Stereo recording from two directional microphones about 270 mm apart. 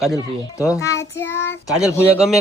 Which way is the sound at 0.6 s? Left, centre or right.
Centre.